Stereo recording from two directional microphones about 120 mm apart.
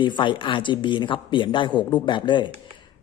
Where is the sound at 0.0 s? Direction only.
45° left (ahead or behind).